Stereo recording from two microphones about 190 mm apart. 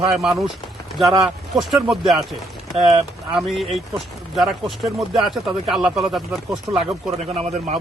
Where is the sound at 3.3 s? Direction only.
Centre (ahead or behind).